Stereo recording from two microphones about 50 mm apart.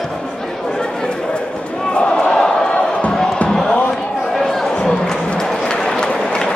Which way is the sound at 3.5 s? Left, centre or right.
Centre.